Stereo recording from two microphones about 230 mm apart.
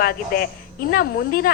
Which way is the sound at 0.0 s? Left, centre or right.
Left.